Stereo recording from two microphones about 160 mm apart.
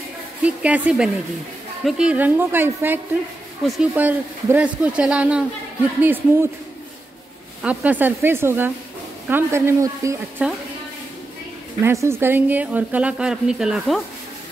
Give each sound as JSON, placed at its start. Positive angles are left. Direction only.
{"t": 0.4, "sound": "a woman's voice", "side_deg": -10}
{"t": 3.6, "sound": "speech", "side_deg": 0}
{"t": 3.9, "sound": "a woman's voice", "side_deg": -10}
{"t": 7.6, "sound": "a woman's voice", "side_deg": -10}
{"t": 11.8, "sound": "a woman's voice", "side_deg": -15}